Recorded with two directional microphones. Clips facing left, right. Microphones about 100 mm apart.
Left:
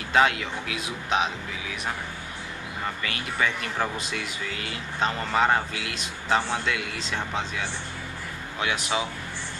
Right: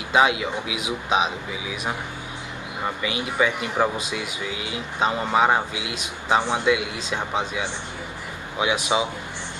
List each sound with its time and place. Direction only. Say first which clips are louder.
0.1 s speech: right 3 dB; 15° right (ahead or behind)